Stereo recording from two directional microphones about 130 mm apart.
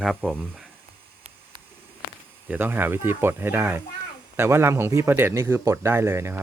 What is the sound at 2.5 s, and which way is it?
Speech, 15° right (ahead or behind).